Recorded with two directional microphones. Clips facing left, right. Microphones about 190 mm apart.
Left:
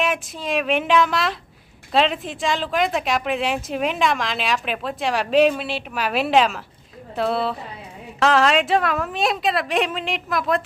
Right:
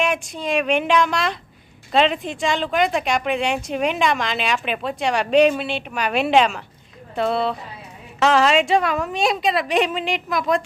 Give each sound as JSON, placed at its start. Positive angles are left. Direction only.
{"t": 0.0, "sound": "speech", "side_deg": 0}